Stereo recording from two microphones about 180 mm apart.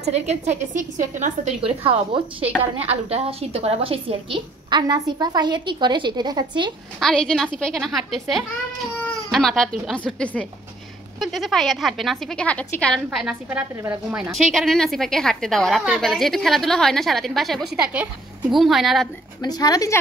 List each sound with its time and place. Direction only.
0.0 s a woman's voice: 35° right (ahead or behind)
7.0 s a woman's voice: 5° left (ahead or behind)
19.4 s speech: 20° left (ahead or behind)